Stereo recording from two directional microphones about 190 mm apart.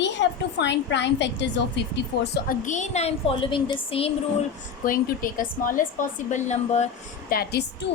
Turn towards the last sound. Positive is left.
turn(degrees=55)  # may be behind; listen again after turning